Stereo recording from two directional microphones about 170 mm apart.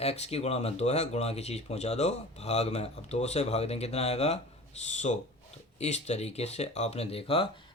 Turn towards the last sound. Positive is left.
turn(degrees=35)  # may be behind; listen again after turning